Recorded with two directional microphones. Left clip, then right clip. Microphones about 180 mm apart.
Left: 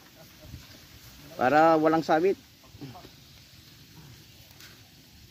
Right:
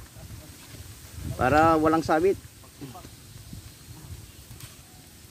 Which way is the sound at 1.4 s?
20° left (ahead or behind).